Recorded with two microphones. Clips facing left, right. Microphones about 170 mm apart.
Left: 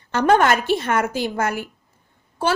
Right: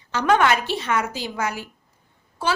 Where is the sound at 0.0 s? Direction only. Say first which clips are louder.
Left 5 dB; 55° left (ahead or behind).